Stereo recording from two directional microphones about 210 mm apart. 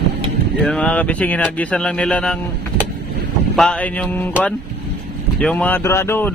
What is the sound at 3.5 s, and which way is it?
Speech, 5° left (ahead or behind).